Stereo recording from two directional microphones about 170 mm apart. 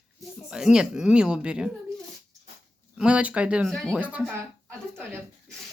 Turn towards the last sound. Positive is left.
turn(degrees=-10)  # may be behind; listen again after turning